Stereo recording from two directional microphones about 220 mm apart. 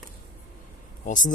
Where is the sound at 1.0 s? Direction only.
35° left (ahead or behind).